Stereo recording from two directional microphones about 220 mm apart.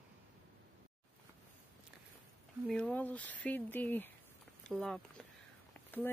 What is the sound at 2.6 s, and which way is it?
Speech, 5° left (ahead or behind).